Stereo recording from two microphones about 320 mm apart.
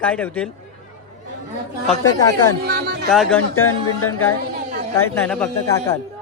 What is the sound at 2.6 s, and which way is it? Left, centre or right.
Speech, right.